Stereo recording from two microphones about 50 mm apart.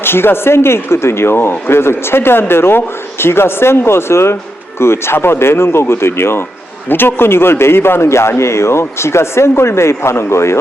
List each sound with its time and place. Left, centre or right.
0.0 s a man's voice: left